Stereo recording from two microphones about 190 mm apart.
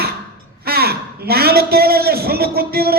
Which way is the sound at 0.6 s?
55° right (ahead or behind).